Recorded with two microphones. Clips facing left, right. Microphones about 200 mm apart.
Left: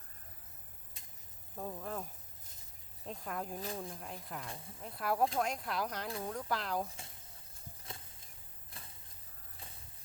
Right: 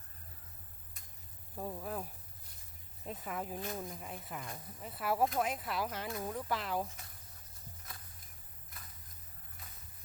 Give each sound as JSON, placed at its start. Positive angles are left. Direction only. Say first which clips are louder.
{"t": 1.5, "sound": "speech", "louder": "right 1 dB", "side_deg": -5}
{"t": 3.1, "sound": "speech", "louder": "right 1 dB", "side_deg": -5}
{"t": 6.9, "sound": "a sound", "louder": "left 2 dB", "side_deg": 25}